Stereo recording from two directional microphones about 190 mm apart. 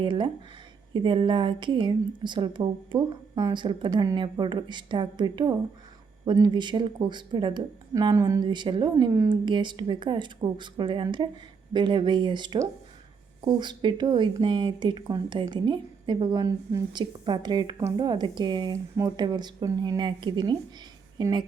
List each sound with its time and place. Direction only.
0.0 s a woman's voice: 25° right (ahead or behind)